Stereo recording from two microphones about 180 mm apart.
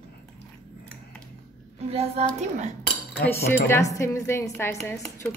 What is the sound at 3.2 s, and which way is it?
Speech, 10° left (ahead or behind).